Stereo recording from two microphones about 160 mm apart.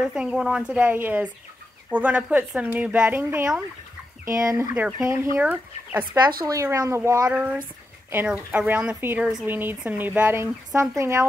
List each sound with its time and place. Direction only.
0.0 s speech: 5° right (ahead or behind); by 7.0 s 20° right (ahead or behind)
7.2 s speech: 10° right (ahead or behind)